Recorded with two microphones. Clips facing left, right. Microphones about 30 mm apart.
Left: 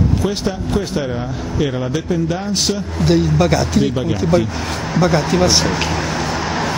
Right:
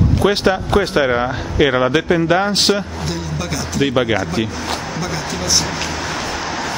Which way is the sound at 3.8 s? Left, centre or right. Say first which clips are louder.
Right 3 dB; right.